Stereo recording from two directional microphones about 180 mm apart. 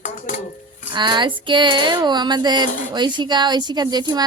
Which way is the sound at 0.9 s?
25° right (ahead or behind).